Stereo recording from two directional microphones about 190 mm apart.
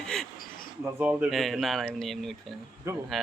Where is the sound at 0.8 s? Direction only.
10° right (ahead or behind).